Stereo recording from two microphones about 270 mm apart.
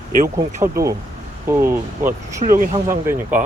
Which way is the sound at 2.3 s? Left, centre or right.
Right.